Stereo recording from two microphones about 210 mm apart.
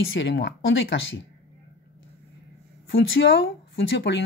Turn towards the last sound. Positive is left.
turn(degrees=55)  # may be behind; listen again after turning